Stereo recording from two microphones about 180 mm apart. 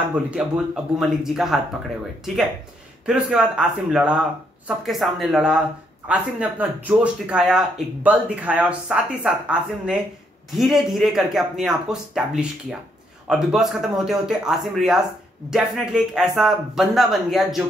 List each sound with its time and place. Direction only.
0.1 s speech: 5° right (ahead or behind)
3.1 s speech: 5° right (ahead or behind)